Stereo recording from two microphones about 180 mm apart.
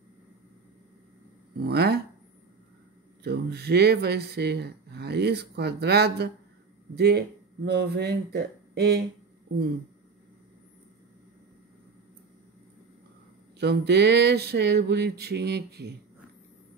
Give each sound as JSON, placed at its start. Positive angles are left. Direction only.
{"t": 1.6, "sound": "speech", "side_deg": -65}
{"t": 3.3, "sound": "speech", "side_deg": -65}
{"t": 13.6, "sound": "a sound", "side_deg": -70}